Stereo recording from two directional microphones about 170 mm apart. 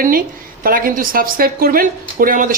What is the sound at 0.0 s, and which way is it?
Speech, 55° right (ahead or behind).